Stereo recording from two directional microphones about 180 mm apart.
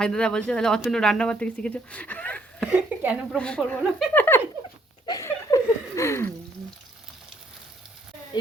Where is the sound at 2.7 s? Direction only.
10° right (ahead or behind).